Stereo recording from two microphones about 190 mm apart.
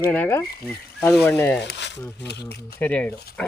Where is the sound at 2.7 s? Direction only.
10° left (ahead or behind).